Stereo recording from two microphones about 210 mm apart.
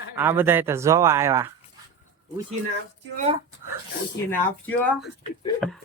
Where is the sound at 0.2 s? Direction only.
10° right (ahead or behind).